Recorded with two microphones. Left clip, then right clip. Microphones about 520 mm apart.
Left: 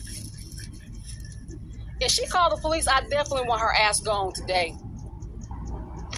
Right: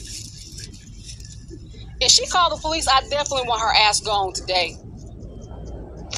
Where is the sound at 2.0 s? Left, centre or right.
Left.